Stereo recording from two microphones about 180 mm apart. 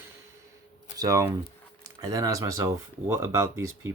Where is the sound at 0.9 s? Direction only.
20° right (ahead or behind).